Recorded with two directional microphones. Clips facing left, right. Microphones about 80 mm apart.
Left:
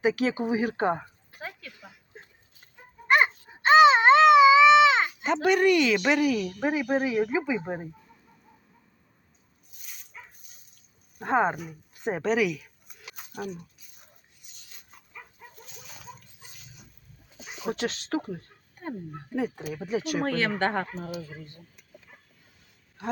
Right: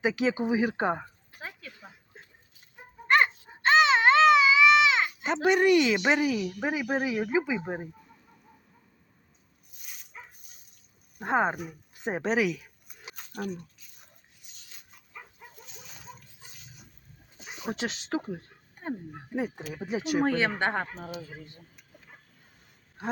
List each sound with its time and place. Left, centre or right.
0.2 s a woman's voice: right
1.4 s a sound: centre
2.1 s a sound: centre; by 5.1 s left
5.2 s a woman's voice: right
9.7 s dog: centre
11.3 s a woman's voice: right
11.5 s speech: centre
12.0 s a woman's voice: right
13.1 s a sound: centre
15.1 s dog: centre
17.7 s a woman's voice: right
20.2 s speech: centre